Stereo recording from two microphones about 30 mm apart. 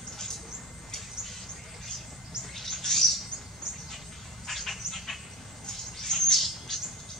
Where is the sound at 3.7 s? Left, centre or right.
Right.